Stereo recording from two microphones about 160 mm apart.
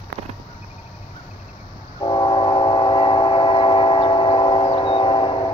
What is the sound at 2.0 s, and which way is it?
Train, 30° left (ahead or behind).